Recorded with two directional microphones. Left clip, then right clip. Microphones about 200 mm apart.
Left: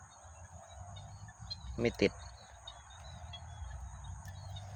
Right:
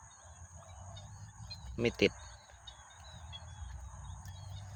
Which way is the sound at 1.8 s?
10° right (ahead or behind).